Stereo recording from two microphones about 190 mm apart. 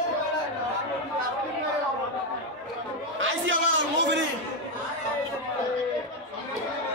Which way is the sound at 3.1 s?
90° right.